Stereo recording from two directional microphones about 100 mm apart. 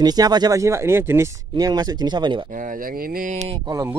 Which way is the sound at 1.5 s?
40° right (ahead or behind).